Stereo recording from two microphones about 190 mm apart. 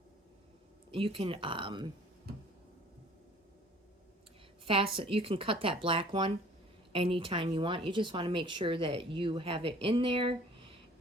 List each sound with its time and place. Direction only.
0.9 s speech: 30° right (ahead or behind)
4.6 s speech: 30° right (ahead or behind)